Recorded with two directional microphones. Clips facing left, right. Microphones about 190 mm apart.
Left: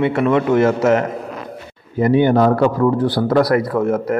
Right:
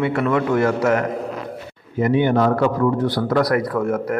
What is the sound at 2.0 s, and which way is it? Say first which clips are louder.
A man's voice: left 3 dB; 35° left (ahead or behind).